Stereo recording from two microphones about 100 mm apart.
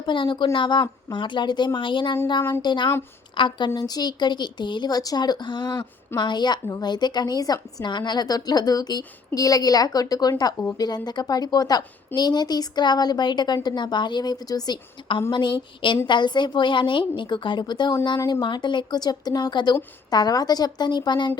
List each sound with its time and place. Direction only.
0.0 s a woman's voice: 55° left (ahead or behind)
15.3 s a woman's voice: 50° left (ahead or behind)